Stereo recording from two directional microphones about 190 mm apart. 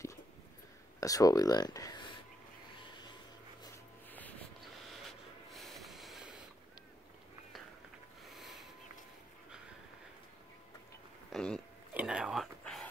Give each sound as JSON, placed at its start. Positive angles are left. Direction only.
{"t": 1.0, "sound": "speech", "side_deg": 20}
{"t": 4.1, "sound": "music", "side_deg": 10}
{"t": 5.5, "sound": "train", "side_deg": 0}
{"t": 8.3, "sound": "a sound", "side_deg": 0}
{"t": 11.3, "sound": "a sound", "side_deg": 5}
{"t": 11.9, "sound": "whispering", "side_deg": -5}